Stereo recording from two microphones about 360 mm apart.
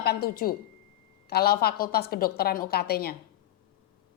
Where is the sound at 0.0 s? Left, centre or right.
Left.